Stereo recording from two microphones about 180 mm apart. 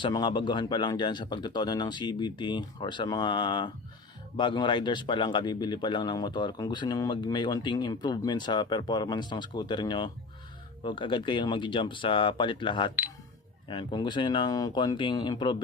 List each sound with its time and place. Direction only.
0.0 s speech: 25° left (ahead or behind)